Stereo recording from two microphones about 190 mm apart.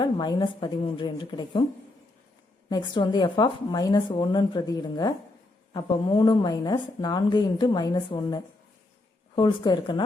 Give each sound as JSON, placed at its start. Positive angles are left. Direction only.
{"t": 0.0, "sound": "a woman's voice", "side_deg": 25}
{"t": 2.6, "sound": "a woman's voice", "side_deg": 20}